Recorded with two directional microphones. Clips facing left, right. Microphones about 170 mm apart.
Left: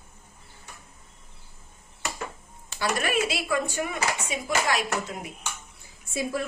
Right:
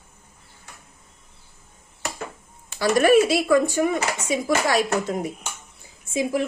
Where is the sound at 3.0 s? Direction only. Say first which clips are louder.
Right 14 dB; 40° right (ahead or behind).